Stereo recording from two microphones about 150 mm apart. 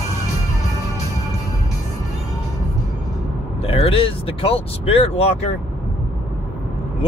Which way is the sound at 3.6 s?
40° left (ahead or behind).